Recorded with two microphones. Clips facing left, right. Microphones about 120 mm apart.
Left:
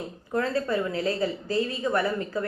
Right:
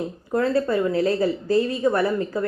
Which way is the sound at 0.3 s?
35° right (ahead or behind).